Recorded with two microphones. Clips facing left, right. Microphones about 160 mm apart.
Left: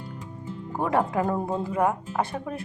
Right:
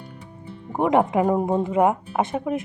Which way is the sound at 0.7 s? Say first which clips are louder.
Right 5 dB; 20° right (ahead or behind).